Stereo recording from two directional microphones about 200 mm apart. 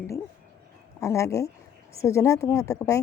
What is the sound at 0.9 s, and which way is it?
A woman's voice, 15° left (ahead or behind).